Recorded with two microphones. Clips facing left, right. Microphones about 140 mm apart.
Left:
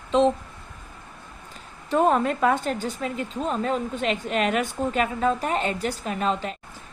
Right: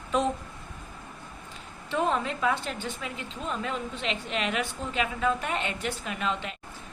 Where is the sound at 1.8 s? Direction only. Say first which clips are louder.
Left 7 dB; 45° left (ahead or behind).